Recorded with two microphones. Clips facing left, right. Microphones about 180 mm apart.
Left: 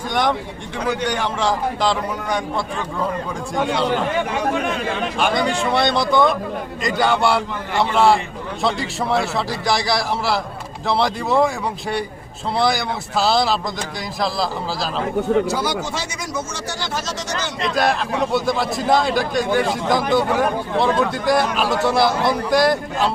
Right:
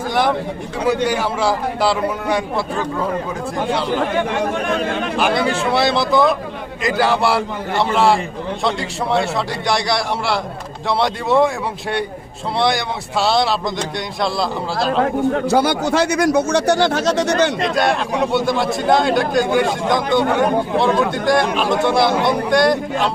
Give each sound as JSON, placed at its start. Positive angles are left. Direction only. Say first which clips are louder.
{"t": 0.1, "sound": "a man's voice", "louder": "right 2 dB", "side_deg": -5}
{"t": 5.1, "sound": "a man's voice", "louder": "right 2 dB", "side_deg": -5}
{"t": 15.4, "sound": "speech", "louder": "right 6 dB", "side_deg": -60}
{"t": 17.6, "sound": "a man's voice", "louder": "right 2 dB", "side_deg": 0}